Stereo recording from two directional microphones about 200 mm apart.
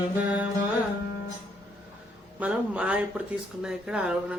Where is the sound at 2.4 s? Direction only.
5° right (ahead or behind).